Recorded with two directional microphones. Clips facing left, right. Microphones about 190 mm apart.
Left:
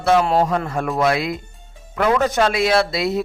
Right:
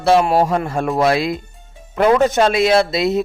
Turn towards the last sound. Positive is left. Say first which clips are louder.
# right 3 dB
turn(degrees=-20)  # may be behind; listen again after turning